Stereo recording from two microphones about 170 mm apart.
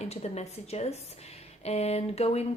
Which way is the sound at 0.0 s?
40° left (ahead or behind).